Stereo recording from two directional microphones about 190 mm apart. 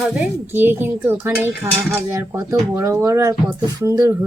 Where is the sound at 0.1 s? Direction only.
10° right (ahead or behind).